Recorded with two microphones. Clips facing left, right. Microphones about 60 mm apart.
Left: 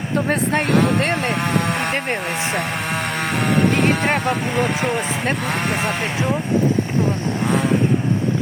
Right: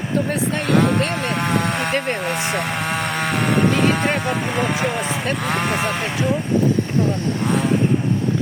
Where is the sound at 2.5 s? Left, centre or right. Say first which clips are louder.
Even; centre.